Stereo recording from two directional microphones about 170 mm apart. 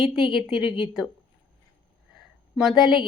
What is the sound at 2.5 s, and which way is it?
Speech, centre (ahead or behind).